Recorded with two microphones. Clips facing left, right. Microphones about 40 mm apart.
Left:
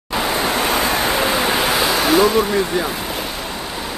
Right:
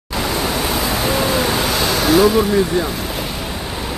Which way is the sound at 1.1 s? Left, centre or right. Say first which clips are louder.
Even; left.